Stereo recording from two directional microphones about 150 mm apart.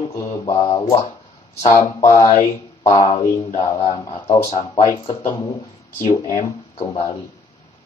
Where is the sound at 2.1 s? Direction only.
25° left (ahead or behind).